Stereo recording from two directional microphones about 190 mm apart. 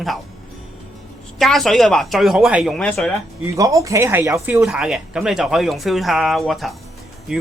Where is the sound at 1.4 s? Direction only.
Centre (ahead or behind).